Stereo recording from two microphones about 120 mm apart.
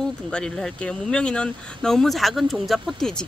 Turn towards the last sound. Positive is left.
turn(degrees=5)  # may be behind; listen again after turning